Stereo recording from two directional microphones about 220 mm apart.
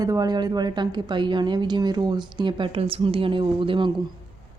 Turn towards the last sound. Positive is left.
turn(degrees=-20)  # may be behind; listen again after turning